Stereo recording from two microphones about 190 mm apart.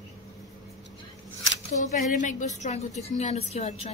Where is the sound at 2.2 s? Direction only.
40° left (ahead or behind).